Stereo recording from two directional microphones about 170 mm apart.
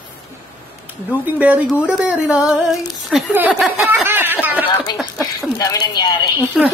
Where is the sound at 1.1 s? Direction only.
10° right (ahead or behind).